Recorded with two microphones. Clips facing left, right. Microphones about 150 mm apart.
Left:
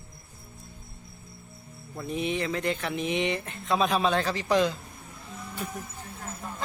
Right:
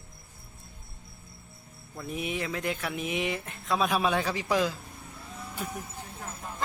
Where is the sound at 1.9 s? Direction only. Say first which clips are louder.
Left 4 dB; 5° right (ahead or behind).